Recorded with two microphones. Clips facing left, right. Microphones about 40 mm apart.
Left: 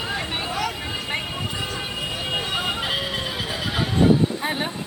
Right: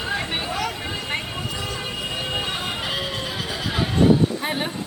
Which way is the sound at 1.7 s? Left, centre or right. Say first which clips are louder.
Even; centre.